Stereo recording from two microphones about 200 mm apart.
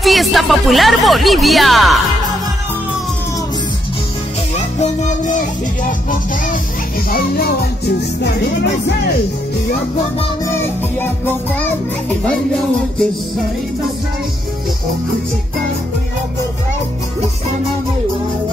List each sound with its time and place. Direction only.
0.0 s speech: centre (ahead or behind)
4.7 s music: 40° left (ahead or behind)
7.1 s music: 50° left (ahead or behind)
10.5 s music: 10° left (ahead or behind)